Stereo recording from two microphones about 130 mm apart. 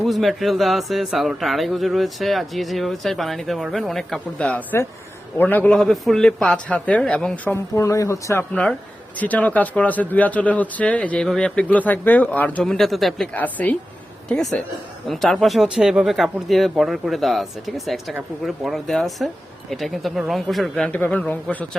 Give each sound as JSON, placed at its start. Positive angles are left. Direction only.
{"t": 0.0, "sound": "speech", "side_deg": 0}
{"t": 7.5, "sound": "speech", "side_deg": 25}
{"t": 13.3, "sound": "speech", "side_deg": 10}